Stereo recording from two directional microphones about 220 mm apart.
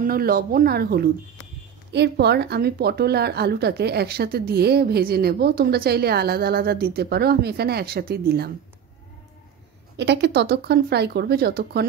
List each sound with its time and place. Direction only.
0.0 s a woman's voice: 40° right (ahead or behind)
9.9 s a woman's voice: 50° right (ahead or behind)